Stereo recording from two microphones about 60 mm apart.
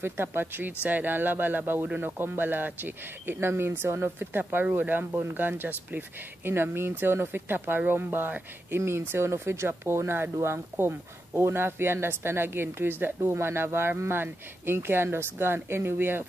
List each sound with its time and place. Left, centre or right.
0.0 s speech: right